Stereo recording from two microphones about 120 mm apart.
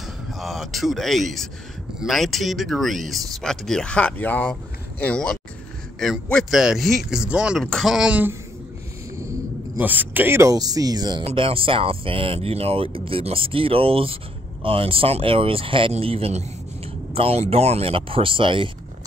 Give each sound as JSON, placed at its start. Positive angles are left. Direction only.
{"t": 0.3, "sound": "speech", "side_deg": 0}
{"t": 9.8, "sound": "speech", "side_deg": -15}
{"t": 11.2, "sound": "speech", "side_deg": -50}